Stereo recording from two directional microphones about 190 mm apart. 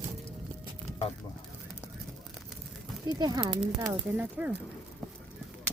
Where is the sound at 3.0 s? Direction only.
25° right (ahead or behind).